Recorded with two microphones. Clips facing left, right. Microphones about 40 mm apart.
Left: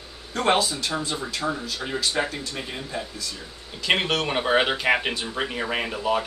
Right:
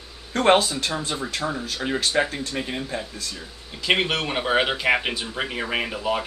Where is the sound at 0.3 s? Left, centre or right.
Right.